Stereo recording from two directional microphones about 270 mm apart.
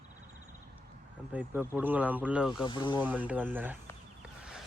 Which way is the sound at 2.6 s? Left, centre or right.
Centre.